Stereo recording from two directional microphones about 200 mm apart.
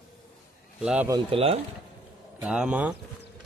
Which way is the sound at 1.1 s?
30° right (ahead or behind).